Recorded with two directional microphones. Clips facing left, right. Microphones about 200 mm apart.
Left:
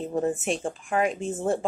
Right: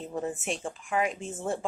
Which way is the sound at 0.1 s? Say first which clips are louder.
Left 6 dB; 40° left (ahead or behind).